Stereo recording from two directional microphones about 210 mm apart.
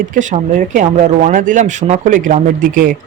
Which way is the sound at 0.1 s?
35° right (ahead or behind).